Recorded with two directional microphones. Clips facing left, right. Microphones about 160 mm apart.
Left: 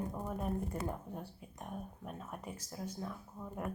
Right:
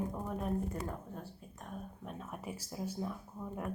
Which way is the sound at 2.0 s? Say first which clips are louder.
Right 4 dB; centre (ahead or behind).